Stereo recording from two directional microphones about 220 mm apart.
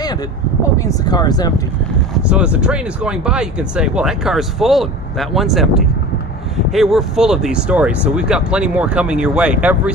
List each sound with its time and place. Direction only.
0.8 s speech: 20° left (ahead or behind)
2.2 s speech: 5° right (ahead or behind)